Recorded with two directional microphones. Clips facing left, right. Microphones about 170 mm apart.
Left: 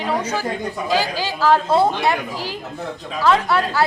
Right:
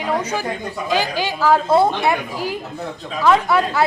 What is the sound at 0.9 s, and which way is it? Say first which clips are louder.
Speech: right 1 dB; 20° right (ahead or behind).